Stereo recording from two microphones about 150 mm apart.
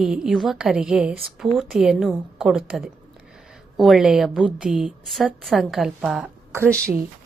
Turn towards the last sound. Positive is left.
turn(degrees=10)  # may be behind; listen again after turning